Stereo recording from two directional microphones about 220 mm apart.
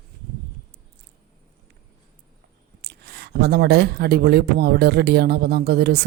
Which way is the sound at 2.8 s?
45° right (ahead or behind).